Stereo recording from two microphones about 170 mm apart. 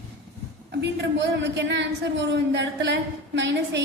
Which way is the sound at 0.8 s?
90° right.